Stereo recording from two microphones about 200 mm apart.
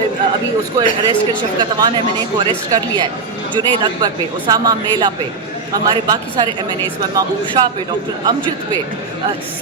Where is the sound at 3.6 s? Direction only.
20° right (ahead or behind).